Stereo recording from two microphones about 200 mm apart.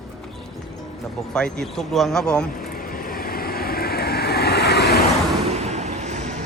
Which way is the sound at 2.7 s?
45° left (ahead or behind).